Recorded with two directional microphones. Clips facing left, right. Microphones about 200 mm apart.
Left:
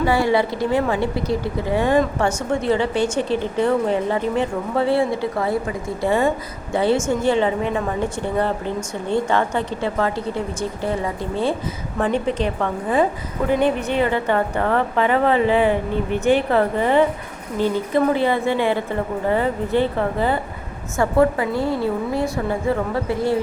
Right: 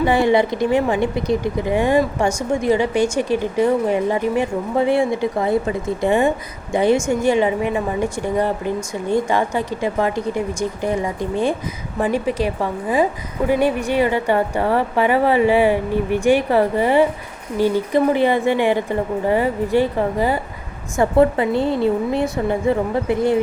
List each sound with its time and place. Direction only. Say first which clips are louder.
0.0 s a woman's voice: right 2 dB; 20° right (ahead or behind)